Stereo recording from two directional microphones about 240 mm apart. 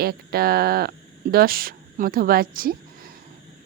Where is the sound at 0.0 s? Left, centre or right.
Right.